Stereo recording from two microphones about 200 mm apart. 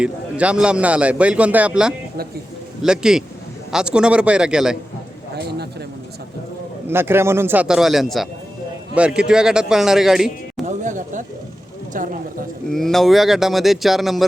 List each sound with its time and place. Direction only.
0.0 s a man's voice: 5° right (ahead or behind)
5.3 s a sound: 55° right (ahead or behind)
6.8 s a man's voice: 10° right (ahead or behind)
10.7 s a sound: 40° right (ahead or behind)
11.9 s speech: 40° right (ahead or behind)
12.7 s a man's voice: centre (ahead or behind)